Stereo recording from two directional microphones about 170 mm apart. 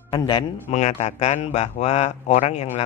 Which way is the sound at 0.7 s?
45° left (ahead or behind).